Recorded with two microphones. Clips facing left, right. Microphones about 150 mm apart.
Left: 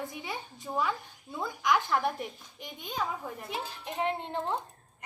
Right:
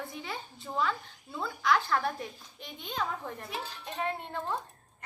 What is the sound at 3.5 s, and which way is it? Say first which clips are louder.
Speech: left 2 dB; 15° left (ahead or behind).